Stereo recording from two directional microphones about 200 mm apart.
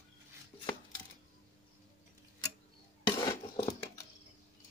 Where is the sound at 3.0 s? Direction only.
25° left (ahead or behind).